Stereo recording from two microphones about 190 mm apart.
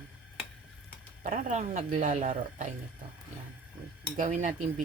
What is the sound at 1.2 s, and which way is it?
Speech, 40° right (ahead or behind).